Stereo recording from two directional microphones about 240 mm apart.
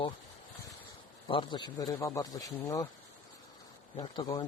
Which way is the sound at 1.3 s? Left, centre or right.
Centre.